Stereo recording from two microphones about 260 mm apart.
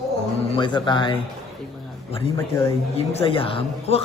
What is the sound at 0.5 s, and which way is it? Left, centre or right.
Speech, centre.